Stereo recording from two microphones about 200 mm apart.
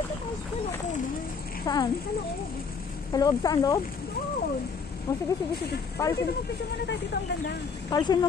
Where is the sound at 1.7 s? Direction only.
20° left (ahead or behind).